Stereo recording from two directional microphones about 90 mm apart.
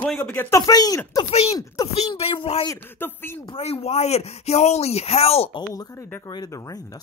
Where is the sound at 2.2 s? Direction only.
75° left (ahead or behind).